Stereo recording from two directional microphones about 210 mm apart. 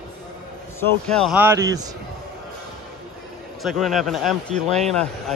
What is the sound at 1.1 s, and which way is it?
Speech, 5° left (ahead or behind).